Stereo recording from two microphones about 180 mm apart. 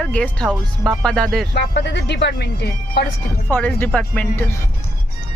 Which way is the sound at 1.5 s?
70° left (ahead or behind).